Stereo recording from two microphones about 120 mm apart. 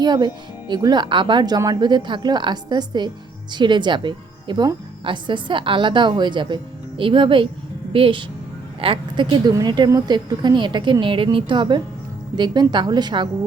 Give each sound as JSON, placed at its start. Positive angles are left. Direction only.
{"t": 0.0, "sound": "speech", "side_deg": -35}